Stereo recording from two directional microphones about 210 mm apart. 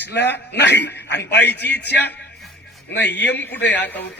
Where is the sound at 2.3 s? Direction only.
Centre (ahead or behind).